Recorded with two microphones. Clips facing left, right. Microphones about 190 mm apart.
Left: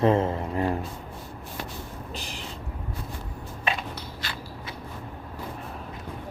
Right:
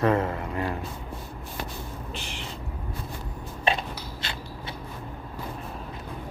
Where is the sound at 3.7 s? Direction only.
30° right (ahead or behind).